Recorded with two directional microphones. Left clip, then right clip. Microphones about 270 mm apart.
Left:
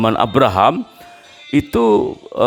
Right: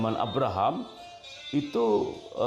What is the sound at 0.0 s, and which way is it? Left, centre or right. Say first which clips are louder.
Speech: left 14 dB; left.